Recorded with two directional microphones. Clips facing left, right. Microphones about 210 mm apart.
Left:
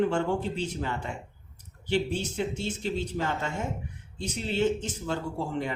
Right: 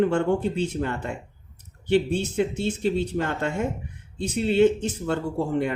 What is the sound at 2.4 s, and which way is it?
Speech, 55° right (ahead or behind).